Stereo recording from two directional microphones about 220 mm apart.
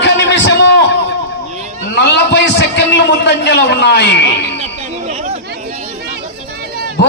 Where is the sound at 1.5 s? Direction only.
30° right (ahead or behind).